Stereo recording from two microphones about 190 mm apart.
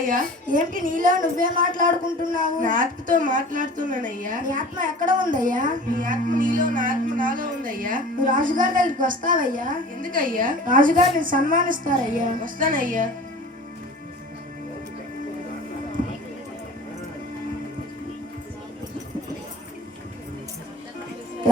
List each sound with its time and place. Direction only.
0.0 s speech: 45° right (ahead or behind)